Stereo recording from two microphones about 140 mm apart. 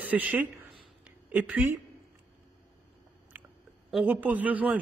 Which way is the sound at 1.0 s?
10° right (ahead or behind).